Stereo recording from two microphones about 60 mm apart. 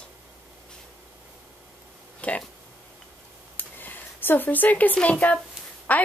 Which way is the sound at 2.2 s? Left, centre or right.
Left.